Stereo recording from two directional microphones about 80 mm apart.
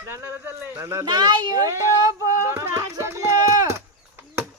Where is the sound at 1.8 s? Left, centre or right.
Right.